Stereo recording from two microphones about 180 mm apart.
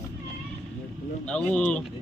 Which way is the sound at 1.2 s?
5° left (ahead or behind).